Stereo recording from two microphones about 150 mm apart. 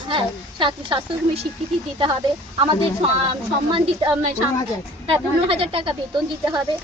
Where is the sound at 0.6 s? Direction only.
35° right (ahead or behind).